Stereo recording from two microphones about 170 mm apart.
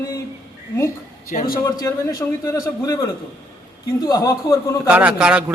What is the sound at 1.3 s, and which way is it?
Speech, 55° left (ahead or behind).